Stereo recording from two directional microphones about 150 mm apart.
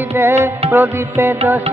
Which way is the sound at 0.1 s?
15° right (ahead or behind).